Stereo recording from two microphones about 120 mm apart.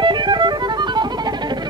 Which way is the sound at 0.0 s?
40° right (ahead or behind).